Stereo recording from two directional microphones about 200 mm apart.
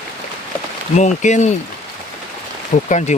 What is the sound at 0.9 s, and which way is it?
Speech, 35° left (ahead or behind).